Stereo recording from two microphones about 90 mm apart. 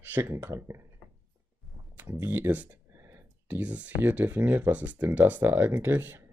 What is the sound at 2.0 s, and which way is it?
Speech, 25° right (ahead or behind).